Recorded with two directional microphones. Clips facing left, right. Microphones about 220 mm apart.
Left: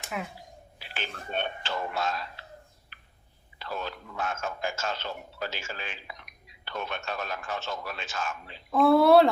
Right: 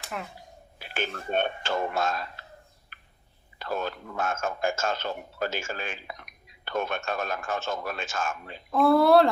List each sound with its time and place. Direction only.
0.1 s speech: 5° left (ahead or behind)
0.8 s speech: 50° right (ahead or behind)
2.9 s a sound: 50° right (ahead or behind)
3.6 s a man's voice: 50° right (ahead or behind)
8.7 s speech: centre (ahead or behind)